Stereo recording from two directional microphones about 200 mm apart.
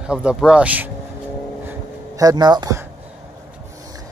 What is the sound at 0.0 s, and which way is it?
Speech, 5° right (ahead or behind).